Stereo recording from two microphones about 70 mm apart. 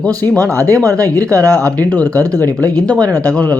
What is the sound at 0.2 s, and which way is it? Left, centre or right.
Speech, right.